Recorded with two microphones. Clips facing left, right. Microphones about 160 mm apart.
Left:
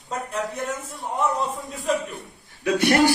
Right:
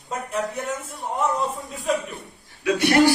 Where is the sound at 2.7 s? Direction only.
50° left (ahead or behind).